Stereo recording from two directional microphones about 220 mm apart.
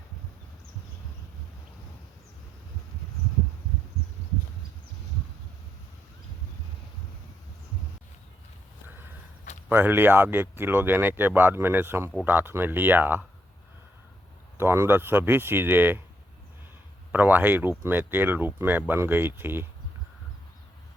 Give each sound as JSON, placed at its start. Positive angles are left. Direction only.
{"t": 9.6, "sound": "speech", "side_deg": -10}
{"t": 14.6, "sound": "speech", "side_deg": -10}
{"t": 17.1, "sound": "speech", "side_deg": -10}